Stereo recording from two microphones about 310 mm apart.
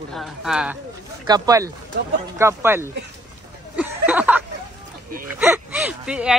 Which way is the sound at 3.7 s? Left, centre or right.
Centre.